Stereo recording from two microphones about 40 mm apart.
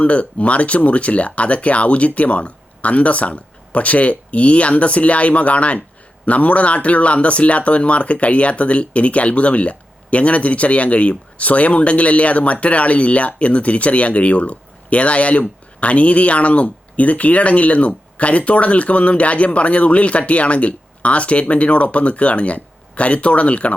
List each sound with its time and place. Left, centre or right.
0.0 s speech: left